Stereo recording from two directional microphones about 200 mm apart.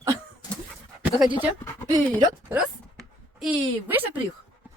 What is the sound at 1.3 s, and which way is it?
Speech, 15° left (ahead or behind).